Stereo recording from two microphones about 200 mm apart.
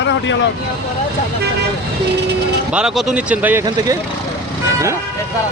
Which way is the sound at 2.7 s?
5° right (ahead or behind).